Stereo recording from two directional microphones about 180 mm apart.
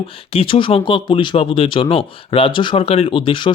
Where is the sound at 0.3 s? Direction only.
30° left (ahead or behind).